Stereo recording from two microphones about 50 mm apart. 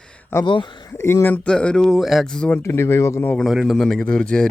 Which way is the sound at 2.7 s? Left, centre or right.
Left.